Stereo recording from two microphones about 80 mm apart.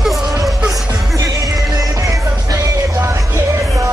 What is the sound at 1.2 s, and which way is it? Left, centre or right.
Music, right.